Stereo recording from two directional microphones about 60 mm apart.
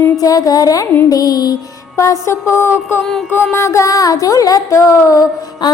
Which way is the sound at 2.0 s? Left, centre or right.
Left.